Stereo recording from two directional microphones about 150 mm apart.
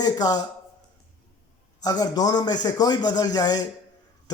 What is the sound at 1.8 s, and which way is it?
Speech, 25° left (ahead or behind).